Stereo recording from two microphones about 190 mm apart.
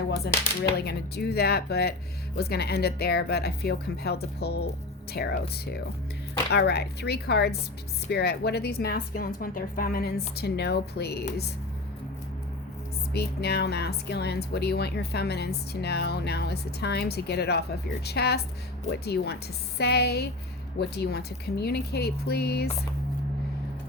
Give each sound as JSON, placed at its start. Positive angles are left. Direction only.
{"t": 0.9, "sound": "speech", "side_deg": 55}
{"t": 13.1, "sound": "speech", "side_deg": 60}